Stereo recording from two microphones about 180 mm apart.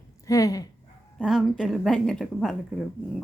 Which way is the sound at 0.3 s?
20° left (ahead or behind).